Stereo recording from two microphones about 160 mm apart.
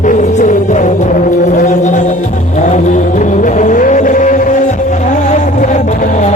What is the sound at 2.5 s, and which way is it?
Vehicle, 50° left (ahead or behind).